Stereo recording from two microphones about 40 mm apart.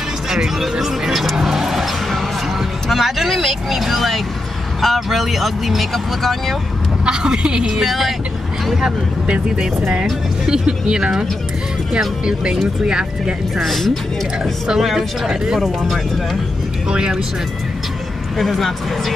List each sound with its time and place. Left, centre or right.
0.3 s speech: centre
1.4 s vehicle: centre
2.9 s speech: centre
7.1 s speech: right
7.8 s speech: centre
10.4 s speech: centre
12.8 s speech: centre
13.6 s speech: centre
15.0 s speech: centre
15.6 s speech: centre
16.9 s speech: centre
18.4 s speech: centre